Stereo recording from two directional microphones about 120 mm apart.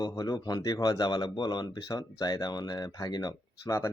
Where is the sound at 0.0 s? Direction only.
30° left (ahead or behind).